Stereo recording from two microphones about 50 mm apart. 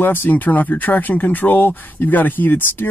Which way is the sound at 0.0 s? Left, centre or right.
Left.